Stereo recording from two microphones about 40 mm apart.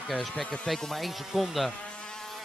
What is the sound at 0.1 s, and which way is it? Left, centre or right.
Speech, centre.